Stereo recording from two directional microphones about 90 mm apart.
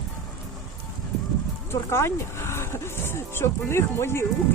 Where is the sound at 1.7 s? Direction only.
30° left (ahead or behind).